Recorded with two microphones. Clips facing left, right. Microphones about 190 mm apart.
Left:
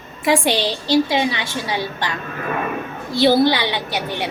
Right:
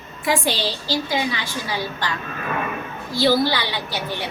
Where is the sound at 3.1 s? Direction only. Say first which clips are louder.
Left 4 dB; 20° left (ahead or behind).